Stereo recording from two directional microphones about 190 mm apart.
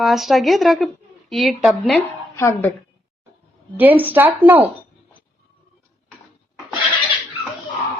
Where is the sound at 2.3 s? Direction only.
15° left (ahead or behind).